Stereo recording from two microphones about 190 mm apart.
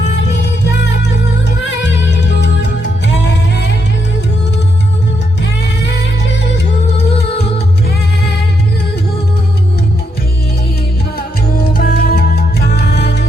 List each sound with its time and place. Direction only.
1.8 s music: 65° left (ahead or behind)
11.5 s music: 50° left (ahead or behind)